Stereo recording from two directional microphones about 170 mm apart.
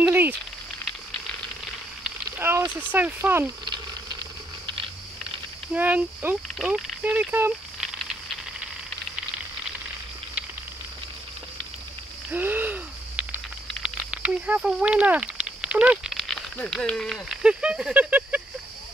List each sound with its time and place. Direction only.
0.0 s a sound: 10° right (ahead or behind)
2.2 s speech: 15° right (ahead or behind)
5.7 s speech: 10° right (ahead or behind)
12.3 s wheeze: 10° right (ahead or behind)
13.8 s speech: 5° right (ahead or behind)